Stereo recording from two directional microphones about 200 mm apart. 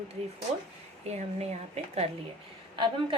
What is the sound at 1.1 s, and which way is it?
A woman's voice, 35° right (ahead or behind).